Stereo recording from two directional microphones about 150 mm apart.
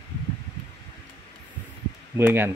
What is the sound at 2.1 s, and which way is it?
Speech, 15° right (ahead or behind).